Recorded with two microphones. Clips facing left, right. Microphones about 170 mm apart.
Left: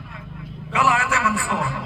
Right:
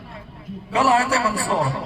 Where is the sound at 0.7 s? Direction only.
35° right (ahead or behind).